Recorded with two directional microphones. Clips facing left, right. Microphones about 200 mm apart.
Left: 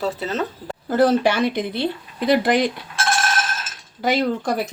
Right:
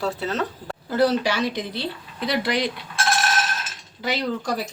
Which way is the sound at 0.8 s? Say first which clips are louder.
Left 4 dB; 50° left (ahead or behind).